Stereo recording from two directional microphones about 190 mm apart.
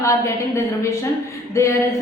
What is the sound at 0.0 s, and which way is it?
A woman's voice, 15° left (ahead or behind).